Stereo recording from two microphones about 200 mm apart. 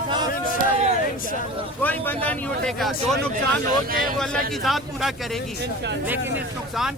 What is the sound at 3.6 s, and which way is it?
Speech, 45° right (ahead or behind).